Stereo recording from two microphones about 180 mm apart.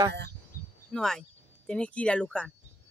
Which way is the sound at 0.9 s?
5° left (ahead or behind).